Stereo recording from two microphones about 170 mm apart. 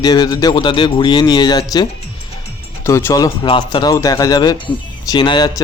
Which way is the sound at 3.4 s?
30° left (ahead or behind).